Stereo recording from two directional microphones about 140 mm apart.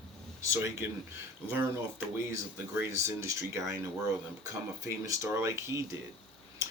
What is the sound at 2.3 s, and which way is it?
Speech, 20° right (ahead or behind).